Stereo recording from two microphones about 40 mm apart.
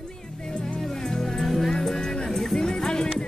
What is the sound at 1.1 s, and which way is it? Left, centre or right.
Music, centre.